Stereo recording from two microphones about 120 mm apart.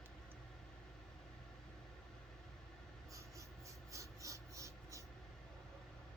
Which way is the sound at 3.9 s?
25° right (ahead or behind).